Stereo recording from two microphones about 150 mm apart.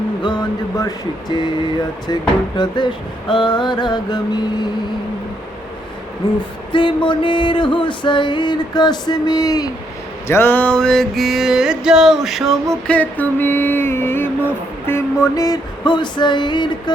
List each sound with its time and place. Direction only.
0.2 s mantra: 30° left (ahead or behind)
2.6 s mantra: 30° left (ahead or behind)
6.2 s mantra: 30° left (ahead or behind)
6.7 s music: 35° left (ahead or behind)
10.2 s mantra: 15° left (ahead or behind); by 16.9 s 30° left (ahead or behind)